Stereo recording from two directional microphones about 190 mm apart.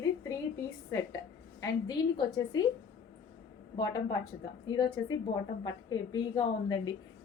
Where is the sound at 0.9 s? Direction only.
15° left (ahead or behind).